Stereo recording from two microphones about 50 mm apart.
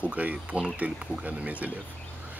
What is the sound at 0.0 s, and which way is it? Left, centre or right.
Speech, right.